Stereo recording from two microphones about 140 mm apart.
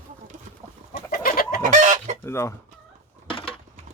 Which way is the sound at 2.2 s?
20° left (ahead or behind).